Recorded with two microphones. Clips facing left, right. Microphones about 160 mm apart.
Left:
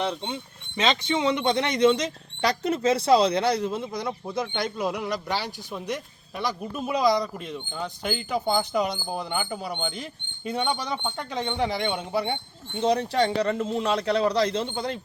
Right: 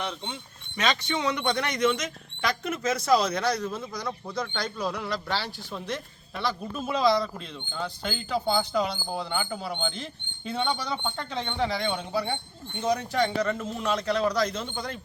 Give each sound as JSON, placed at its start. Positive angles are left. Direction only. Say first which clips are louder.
{"t": 0.0, "sound": "speech", "louder": "left 5 dB", "side_deg": 25}